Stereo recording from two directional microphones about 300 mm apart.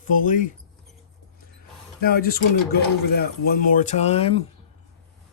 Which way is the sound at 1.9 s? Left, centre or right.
Left.